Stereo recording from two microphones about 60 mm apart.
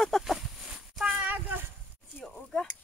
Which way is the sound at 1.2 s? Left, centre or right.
Right.